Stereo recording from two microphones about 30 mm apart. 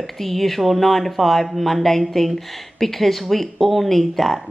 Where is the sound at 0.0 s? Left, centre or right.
Centre.